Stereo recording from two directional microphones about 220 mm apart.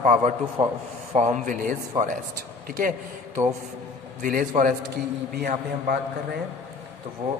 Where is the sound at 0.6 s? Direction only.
15° right (ahead or behind).